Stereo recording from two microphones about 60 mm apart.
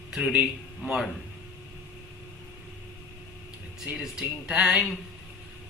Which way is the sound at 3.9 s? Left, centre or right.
Centre.